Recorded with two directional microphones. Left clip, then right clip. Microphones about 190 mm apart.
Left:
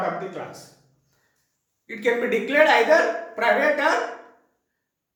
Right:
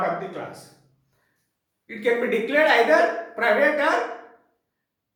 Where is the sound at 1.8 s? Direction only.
20° left (ahead or behind).